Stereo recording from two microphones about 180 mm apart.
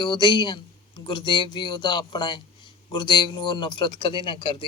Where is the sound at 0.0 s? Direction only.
25° left (ahead or behind).